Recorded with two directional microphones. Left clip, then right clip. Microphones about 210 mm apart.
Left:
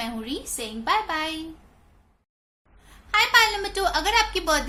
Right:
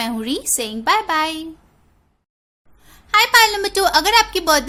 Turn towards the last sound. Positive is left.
turn(degrees=-45)  # may be behind; listen again after turning